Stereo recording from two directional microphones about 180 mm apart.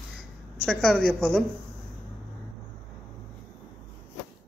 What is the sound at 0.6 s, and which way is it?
Speech, 5° left (ahead or behind).